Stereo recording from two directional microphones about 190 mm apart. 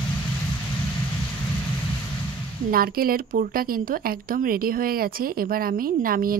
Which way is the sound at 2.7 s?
50° right (ahead or behind).